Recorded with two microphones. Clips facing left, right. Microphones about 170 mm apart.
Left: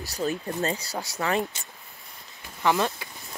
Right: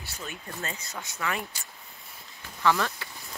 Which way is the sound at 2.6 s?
20° left (ahead or behind).